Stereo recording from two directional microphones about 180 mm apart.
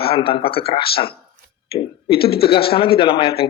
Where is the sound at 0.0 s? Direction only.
30° left (ahead or behind).